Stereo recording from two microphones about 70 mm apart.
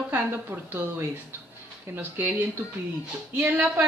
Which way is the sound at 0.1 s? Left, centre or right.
Right.